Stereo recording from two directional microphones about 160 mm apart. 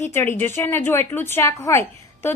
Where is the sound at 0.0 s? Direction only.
15° left (ahead or behind).